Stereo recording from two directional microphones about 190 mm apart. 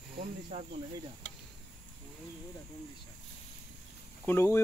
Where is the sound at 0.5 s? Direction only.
30° right (ahead or behind).